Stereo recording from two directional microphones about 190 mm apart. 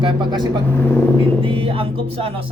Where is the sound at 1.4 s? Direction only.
30° right (ahead or behind).